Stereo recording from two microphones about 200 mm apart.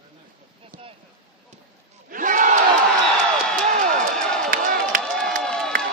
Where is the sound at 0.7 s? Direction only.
45° right (ahead or behind).